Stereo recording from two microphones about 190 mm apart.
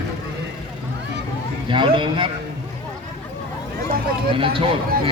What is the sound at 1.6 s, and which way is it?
Speech, 25° right (ahead or behind).